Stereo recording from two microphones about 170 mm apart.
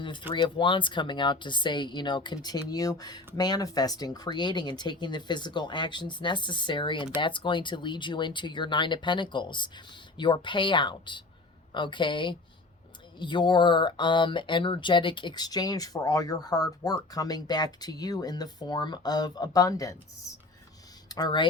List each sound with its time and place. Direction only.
0.0 s speech: 30° left (ahead or behind)
21.1 s speech: 25° left (ahead or behind)